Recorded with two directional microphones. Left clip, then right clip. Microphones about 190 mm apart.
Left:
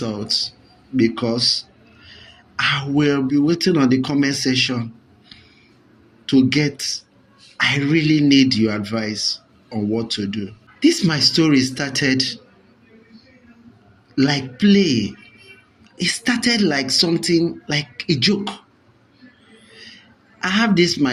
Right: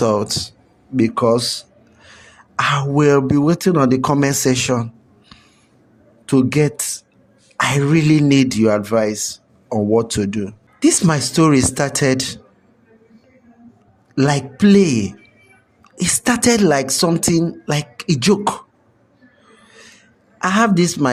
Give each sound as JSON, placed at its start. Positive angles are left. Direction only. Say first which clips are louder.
{"t": 0.0, "sound": "speech", "louder": "right 11 dB", "side_deg": -80}
{"t": 0.9, "sound": "speech", "louder": "right 5 dB", "side_deg": -65}
{"t": 2.6, "sound": "speech", "louder": "right 2 dB", "side_deg": -70}
{"t": 6.3, "sound": "speech", "louder": "right 1 dB", "side_deg": -65}
{"t": 14.2, "sound": "speech", "louder": "right 2 dB", "side_deg": -70}
{"t": 20.4, "sound": "speech", "louder": "right 2 dB", "side_deg": -65}